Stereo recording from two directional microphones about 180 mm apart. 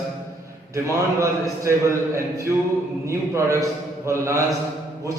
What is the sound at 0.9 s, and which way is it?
A man's voice, 15° right (ahead or behind).